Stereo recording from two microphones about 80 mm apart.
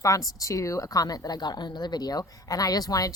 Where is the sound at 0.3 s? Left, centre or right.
Left.